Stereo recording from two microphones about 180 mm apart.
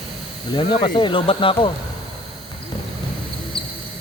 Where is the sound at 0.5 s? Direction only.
25° left (ahead or behind).